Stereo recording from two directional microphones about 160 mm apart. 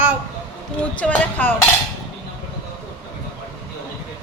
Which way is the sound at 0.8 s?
10° left (ahead or behind).